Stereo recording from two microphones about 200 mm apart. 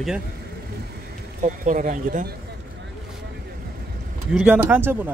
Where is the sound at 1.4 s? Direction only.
40° right (ahead or behind).